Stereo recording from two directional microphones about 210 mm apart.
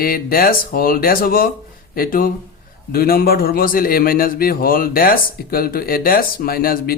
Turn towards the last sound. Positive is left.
turn(degrees=45)  # may be behind; listen again after turning